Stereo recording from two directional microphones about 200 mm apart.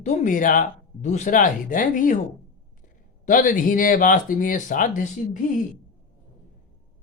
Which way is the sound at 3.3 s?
40° left (ahead or behind).